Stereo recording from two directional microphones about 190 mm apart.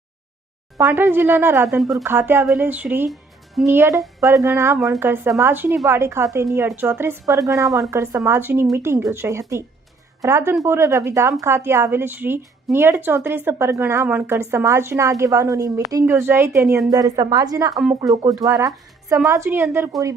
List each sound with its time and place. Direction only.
0.8 s speech: 10° right (ahead or behind)
1.6 s speech: centre (ahead or behind)
2.0 s speech: 10° right (ahead or behind)
3.1 s music: centre (ahead or behind)
3.7 s a woman's voice: 15° right (ahead or behind)